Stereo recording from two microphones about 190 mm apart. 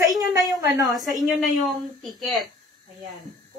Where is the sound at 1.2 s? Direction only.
Centre (ahead or behind).